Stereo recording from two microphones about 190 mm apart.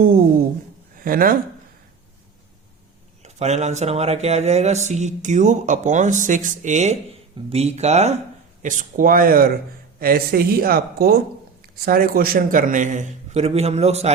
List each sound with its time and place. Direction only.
0.9 s speech: 50° right (ahead or behind)
3.2 s a man's voice: 35° right (ahead or behind)